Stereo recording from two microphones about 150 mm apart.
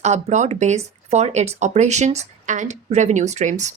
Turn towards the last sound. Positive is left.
turn(degrees=-50)  # may be behind; listen again after turning